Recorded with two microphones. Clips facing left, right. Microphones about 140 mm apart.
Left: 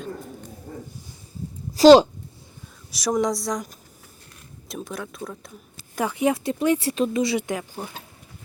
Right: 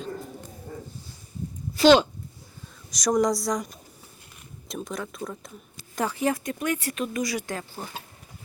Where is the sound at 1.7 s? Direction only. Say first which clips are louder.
Left 6 dB; 35° left (ahead or behind).